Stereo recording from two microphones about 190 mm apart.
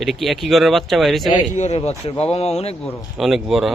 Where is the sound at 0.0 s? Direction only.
Centre (ahead or behind).